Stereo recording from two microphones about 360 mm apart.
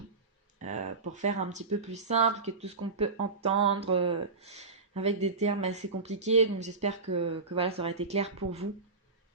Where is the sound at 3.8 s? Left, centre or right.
Centre.